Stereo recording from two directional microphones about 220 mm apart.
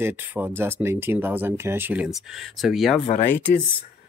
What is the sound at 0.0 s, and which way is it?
Speech, 10° right (ahead or behind).